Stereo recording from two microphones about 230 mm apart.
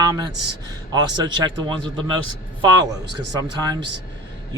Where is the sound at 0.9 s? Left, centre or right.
Centre.